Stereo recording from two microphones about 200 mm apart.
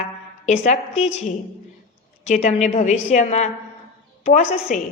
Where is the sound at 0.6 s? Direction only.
35° left (ahead or behind).